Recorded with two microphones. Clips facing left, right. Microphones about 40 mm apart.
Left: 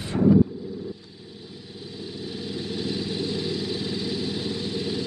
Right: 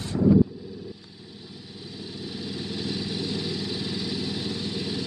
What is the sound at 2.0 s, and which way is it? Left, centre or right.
Vehicle, left.